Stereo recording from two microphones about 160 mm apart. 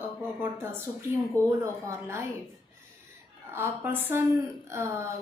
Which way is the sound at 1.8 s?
15° right (ahead or behind).